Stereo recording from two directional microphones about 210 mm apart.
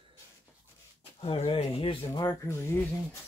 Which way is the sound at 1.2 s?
25° left (ahead or behind).